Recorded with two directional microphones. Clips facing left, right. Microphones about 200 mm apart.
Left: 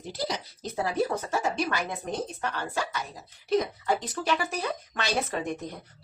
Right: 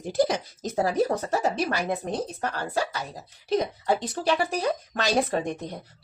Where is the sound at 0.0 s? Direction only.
50° right (ahead or behind).